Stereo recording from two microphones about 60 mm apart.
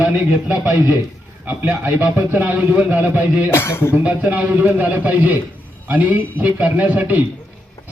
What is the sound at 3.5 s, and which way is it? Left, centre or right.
Speech, left.